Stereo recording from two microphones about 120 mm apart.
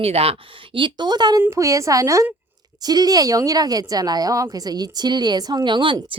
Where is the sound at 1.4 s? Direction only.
25° right (ahead or behind).